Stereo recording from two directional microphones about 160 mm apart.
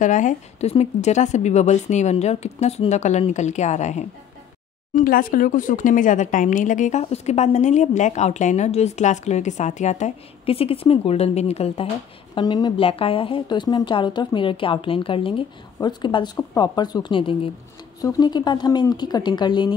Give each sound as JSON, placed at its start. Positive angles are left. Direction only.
{"t": 0.0, "sound": "a woman's voice", "side_deg": 50}
{"t": 4.9, "sound": "a woman's voice", "side_deg": 60}
{"t": 12.4, "sound": "a woman's voice", "side_deg": 25}